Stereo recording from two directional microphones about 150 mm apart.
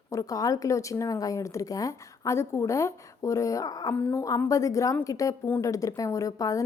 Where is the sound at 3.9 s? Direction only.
15° left (ahead or behind).